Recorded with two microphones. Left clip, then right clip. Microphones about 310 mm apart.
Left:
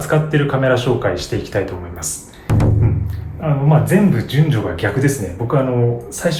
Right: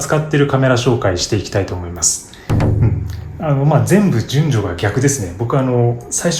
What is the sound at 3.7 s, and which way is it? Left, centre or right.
Speech, centre.